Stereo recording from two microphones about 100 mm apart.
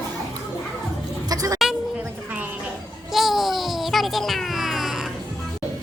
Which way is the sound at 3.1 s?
Centre (ahead or behind).